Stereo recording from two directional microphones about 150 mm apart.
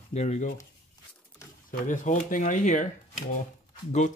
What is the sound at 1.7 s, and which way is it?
Speech, 65° left (ahead or behind).